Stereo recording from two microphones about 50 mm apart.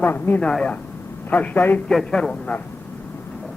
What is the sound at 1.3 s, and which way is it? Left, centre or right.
A man's voice, left.